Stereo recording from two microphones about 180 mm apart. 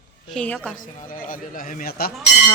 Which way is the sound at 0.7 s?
50° left (ahead or behind).